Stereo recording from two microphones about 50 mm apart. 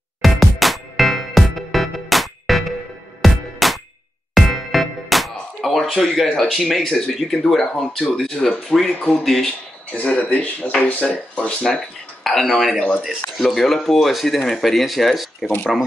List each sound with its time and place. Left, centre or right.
0.2 s music: centre
6.3 s speech: centre
9.9 s speech: left
12.2 s speech: centre